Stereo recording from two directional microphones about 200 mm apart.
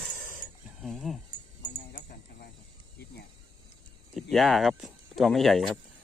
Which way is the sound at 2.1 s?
55° left (ahead or behind).